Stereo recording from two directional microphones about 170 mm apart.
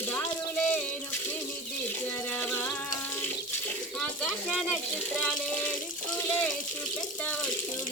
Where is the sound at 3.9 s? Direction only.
5° left (ahead or behind).